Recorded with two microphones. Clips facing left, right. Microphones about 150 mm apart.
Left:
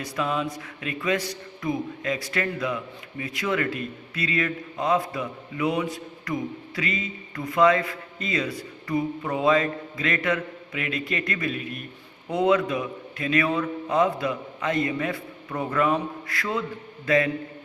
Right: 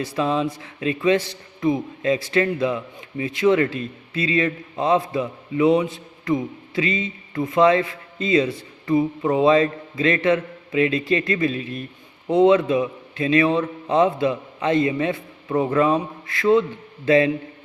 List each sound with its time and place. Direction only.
0.0 s speech: 30° right (ahead or behind)